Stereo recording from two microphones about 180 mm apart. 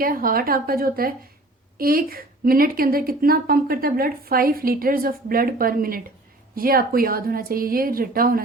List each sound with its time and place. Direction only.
0.0 s a woman's voice: 55° right (ahead or behind)